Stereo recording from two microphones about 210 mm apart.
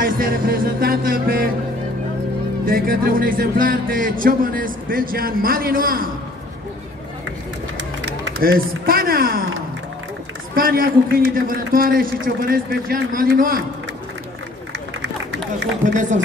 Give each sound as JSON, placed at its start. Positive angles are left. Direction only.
{"t": 0.0, "sound": "music", "side_deg": -45}
{"t": 2.6, "sound": "speech", "side_deg": -40}
{"t": 8.0, "sound": "a sound", "side_deg": -50}
{"t": 10.5, "sound": "speech", "side_deg": -45}
{"t": 15.9, "sound": "speech", "side_deg": -35}